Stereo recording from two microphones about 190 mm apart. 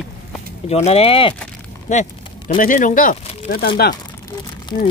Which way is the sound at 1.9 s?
40° left (ahead or behind).